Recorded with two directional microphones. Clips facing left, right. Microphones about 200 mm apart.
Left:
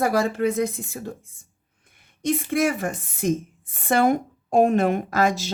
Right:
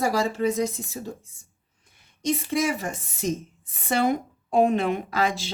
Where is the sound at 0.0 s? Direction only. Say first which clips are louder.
Left 2 dB; 55° left (ahead or behind).